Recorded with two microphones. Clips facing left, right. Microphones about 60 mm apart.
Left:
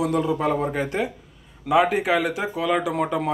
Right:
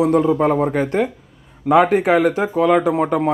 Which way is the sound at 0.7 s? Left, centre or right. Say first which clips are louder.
Right 6 dB; right.